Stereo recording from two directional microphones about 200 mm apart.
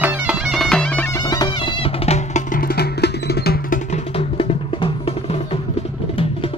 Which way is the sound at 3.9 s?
30° left (ahead or behind).